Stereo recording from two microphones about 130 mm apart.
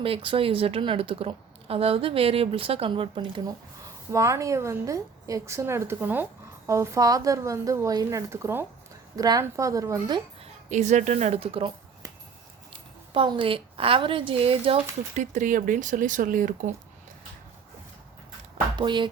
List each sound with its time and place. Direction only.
0.0 s speech: 40° right (ahead or behind)
4.1 s a woman's voice: 25° right (ahead or behind)
10.4 s a woman's voice: 60° right (ahead or behind); by 11.7 s 45° right (ahead or behind)
12.7 s a woman's voice: 40° right (ahead or behind)
15.1 s speech: 65° right (ahead or behind); by 16.7 s 90° right
18.8 s speech: 35° right (ahead or behind)